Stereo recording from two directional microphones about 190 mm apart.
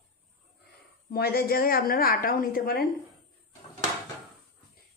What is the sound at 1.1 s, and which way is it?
A woman's voice, 55° left (ahead or behind).